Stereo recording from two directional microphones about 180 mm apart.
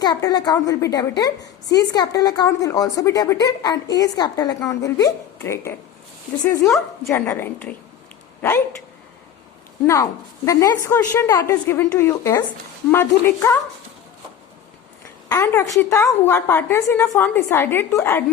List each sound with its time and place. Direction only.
0.0 s a woman's voice: 20° left (ahead or behind)
9.8 s a woman's voice: 15° left (ahead or behind)
15.3 s a woman's voice: 15° left (ahead or behind)